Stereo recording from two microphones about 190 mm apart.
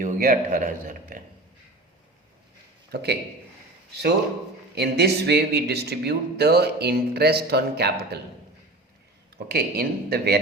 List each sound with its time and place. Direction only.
0.0 s a man's voice: 45° right (ahead or behind)
2.9 s speech: 60° right (ahead or behind)
4.7 s speech: 60° right (ahead or behind)
9.5 s speech: 55° right (ahead or behind)